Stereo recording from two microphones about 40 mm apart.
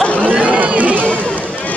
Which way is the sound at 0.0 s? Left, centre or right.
Left.